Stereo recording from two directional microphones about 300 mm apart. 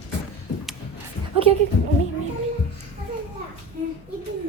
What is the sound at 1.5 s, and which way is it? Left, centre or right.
Speech, centre.